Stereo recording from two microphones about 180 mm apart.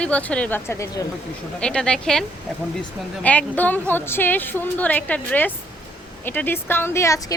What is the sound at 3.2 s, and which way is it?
Speech, 10° left (ahead or behind).